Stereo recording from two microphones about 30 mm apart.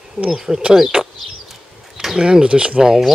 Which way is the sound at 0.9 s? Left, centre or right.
Right.